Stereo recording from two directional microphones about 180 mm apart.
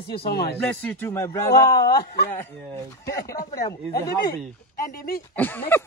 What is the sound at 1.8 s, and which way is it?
Speech, 60° left (ahead or behind).